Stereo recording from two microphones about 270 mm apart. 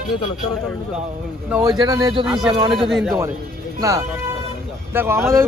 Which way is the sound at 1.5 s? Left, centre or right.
Centre.